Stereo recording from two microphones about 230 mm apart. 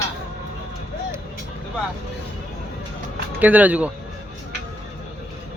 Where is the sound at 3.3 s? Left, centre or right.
Centre.